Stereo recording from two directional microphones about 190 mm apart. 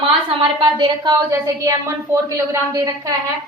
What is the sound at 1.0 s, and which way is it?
A woman's voice, 15° right (ahead or behind).